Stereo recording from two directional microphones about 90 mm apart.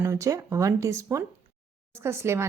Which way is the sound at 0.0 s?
35° right (ahead or behind).